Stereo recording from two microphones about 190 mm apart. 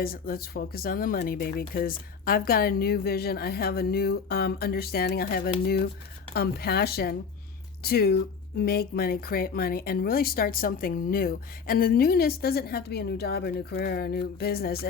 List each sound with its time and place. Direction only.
0.0 s speech: 50° left (ahead or behind)